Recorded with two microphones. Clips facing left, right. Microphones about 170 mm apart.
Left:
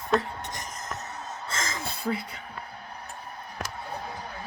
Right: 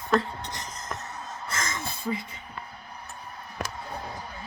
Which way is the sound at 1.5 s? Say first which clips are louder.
Right 1 dB; 30° left (ahead or behind).